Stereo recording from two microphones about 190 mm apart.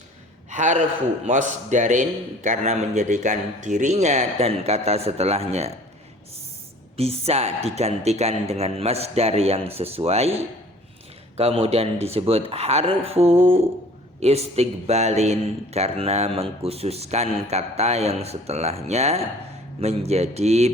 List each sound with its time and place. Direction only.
0.5 s a man's voice: 40° right (ahead or behind)
6.9 s a man's voice: 30° right (ahead or behind)
11.3 s a man's voice: 30° right (ahead or behind)